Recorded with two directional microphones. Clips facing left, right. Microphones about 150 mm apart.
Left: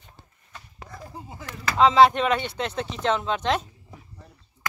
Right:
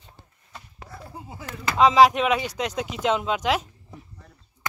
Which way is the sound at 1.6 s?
15° right (ahead or behind).